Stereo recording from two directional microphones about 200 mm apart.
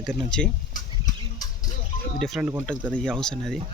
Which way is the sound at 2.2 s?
Centre (ahead or behind).